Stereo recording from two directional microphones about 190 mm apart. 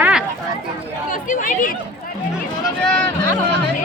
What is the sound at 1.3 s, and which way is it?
Speech, 45° left (ahead or behind).